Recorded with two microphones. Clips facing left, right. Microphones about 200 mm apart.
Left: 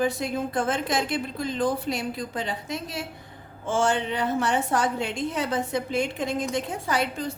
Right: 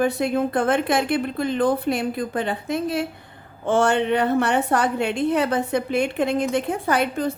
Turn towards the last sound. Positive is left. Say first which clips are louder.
# right 5 dB
turn(degrees=-55)  # may be behind; listen again after turning